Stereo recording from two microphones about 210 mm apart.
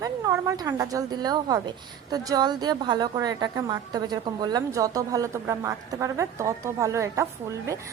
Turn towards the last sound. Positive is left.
turn(degrees=-15)  # may be behind; listen again after turning